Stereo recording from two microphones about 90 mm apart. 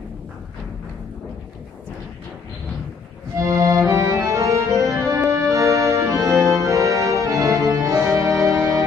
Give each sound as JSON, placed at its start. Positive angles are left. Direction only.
{"t": 3.3, "sound": "music", "side_deg": -40}
{"t": 6.5, "sound": "organ", "side_deg": -35}